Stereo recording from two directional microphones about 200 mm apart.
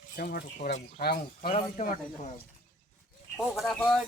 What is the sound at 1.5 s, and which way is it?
Speech, 40° left (ahead or behind).